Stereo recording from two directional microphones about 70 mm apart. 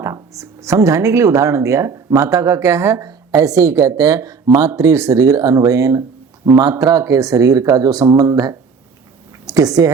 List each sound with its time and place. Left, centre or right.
0.0 s speech: right
4.7 s speech: right